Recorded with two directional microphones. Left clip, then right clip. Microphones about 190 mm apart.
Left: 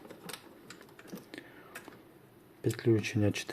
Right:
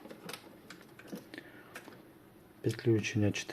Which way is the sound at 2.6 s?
10° left (ahead or behind).